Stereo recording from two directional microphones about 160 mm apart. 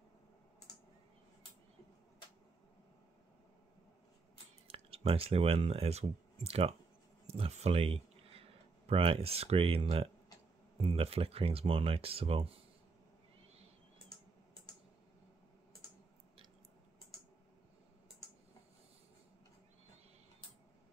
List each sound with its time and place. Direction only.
4.6 s speech: 35° right (ahead or behind)